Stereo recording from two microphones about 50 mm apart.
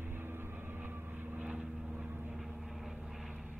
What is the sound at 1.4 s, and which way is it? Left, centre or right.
Vehicle, right.